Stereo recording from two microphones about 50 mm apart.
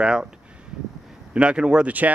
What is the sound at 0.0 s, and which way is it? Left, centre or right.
Speech, centre.